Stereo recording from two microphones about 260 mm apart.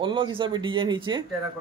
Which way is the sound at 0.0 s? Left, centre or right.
Centre.